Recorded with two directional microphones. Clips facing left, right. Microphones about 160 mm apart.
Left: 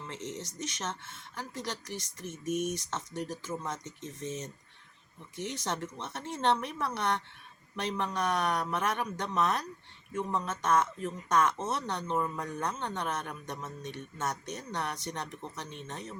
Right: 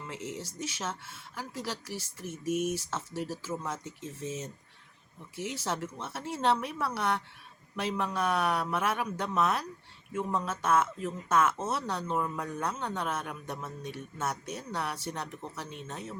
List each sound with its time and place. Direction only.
0.0 s speech: 5° right (ahead or behind)